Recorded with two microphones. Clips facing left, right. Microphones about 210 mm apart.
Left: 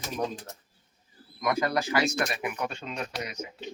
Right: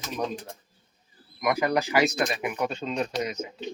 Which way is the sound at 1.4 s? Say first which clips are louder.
Right 3 dB; 15° right (ahead or behind).